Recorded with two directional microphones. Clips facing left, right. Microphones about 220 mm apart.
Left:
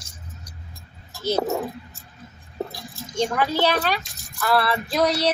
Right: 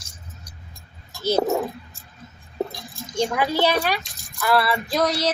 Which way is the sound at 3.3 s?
15° right (ahead or behind).